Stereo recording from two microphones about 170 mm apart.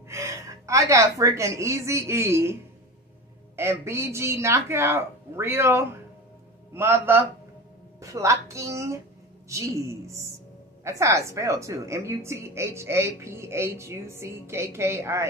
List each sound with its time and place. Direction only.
0.1 s a woman's voice: 15° right (ahead or behind)
3.5 s a woman's voice: 15° right (ahead or behind)